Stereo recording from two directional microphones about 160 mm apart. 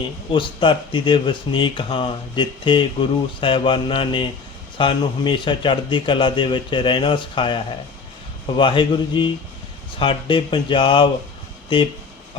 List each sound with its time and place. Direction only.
0.3 s a man's voice: 30° left (ahead or behind)